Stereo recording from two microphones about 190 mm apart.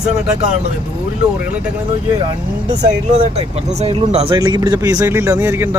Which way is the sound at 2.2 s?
25° right (ahead or behind).